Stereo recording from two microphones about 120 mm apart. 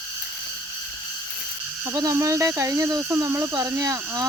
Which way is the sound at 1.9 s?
25° right (ahead or behind).